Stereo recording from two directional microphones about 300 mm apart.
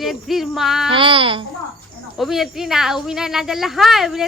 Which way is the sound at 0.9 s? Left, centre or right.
Centre.